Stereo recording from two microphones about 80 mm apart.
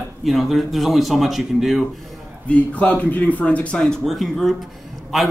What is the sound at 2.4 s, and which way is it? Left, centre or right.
Speech, centre.